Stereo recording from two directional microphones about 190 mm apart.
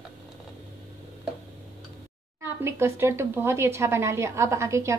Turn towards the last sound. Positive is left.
turn(degrees=-15)  # may be behind; listen again after turning